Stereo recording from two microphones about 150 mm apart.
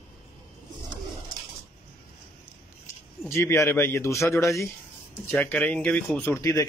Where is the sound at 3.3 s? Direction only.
15° left (ahead or behind).